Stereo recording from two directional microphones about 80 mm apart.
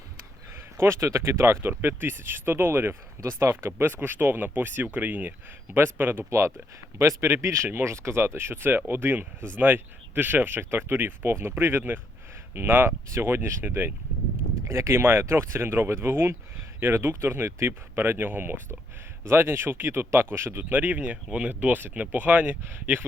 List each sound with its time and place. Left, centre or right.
0.8 s speech: right; by 21.5 s centre
21.5 s speech: right